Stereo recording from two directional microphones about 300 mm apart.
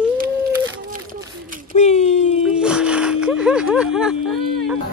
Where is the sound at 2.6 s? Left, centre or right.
Centre.